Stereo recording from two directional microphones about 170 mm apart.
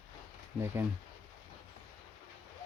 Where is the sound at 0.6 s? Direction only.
15° right (ahead or behind).